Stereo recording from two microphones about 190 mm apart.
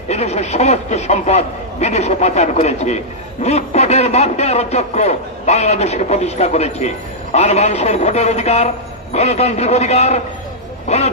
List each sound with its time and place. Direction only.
0.1 s a man's voice: 35° left (ahead or behind)